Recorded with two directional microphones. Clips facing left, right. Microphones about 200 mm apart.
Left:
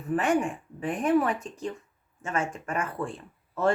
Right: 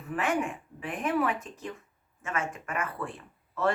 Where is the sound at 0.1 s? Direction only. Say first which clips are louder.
Left 4 dB; 30° left (ahead or behind).